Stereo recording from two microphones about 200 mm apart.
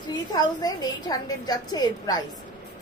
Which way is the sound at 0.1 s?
20° left (ahead or behind).